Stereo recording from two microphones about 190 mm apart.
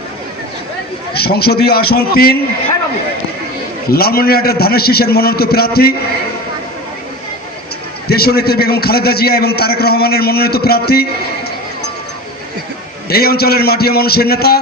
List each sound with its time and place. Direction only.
1.1 s a man's voice: 55° left (ahead or behind)
3.8 s a man's voice: 55° left (ahead or behind)
8.1 s a man's voice: 55° left (ahead or behind)
13.1 s a man's voice: 55° left (ahead or behind)